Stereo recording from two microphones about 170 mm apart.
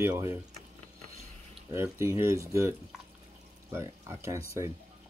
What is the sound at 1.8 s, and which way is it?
Speech, 15° right (ahead or behind).